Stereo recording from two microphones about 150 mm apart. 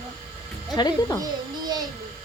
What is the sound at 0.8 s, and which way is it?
Speech, 25° left (ahead or behind).